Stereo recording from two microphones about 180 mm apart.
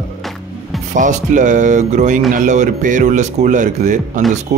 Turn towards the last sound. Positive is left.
turn(degrees=-40)  # may be behind; listen again after turning